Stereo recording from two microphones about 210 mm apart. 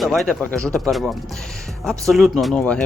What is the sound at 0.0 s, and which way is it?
Speech, centre (ahead or behind).